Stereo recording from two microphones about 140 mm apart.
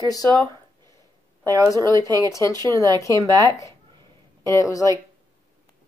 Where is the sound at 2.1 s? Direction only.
20° left (ahead or behind).